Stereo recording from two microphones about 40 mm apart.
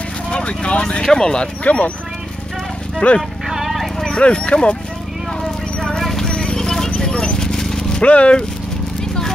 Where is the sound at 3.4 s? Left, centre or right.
Centre.